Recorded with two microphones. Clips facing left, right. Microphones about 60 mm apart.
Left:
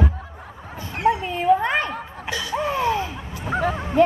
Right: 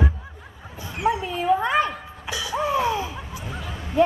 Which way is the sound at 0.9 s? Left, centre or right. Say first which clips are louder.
Left 3 dB; left.